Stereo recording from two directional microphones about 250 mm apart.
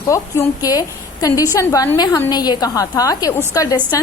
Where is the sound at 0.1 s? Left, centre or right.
Centre.